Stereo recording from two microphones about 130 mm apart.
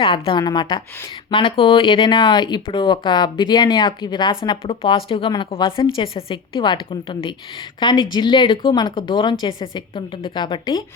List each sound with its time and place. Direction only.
0.0 s a woman's voice: 45° left (ahead or behind)
4.4 s speech: 45° left (ahead or behind)